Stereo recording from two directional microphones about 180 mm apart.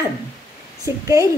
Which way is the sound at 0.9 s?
15° right (ahead or behind).